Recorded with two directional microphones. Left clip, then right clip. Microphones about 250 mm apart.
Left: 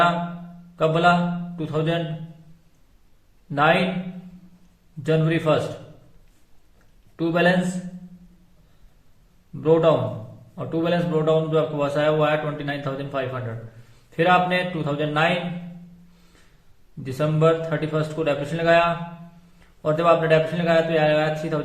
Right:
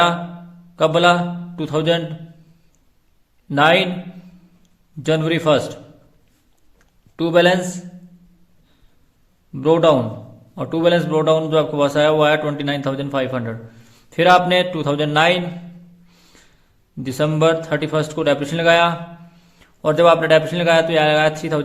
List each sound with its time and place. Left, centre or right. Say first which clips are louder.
0.8 s a man's voice: right 4 dB; right
3.5 s a man's voice: right 5 dB; right
5.0 s a man's voice: right 4 dB; right
7.2 s a man's voice: right 6 dB; right
9.6 s a man's voice: right 4 dB; right
17.0 s a man's voice: right 4 dB; right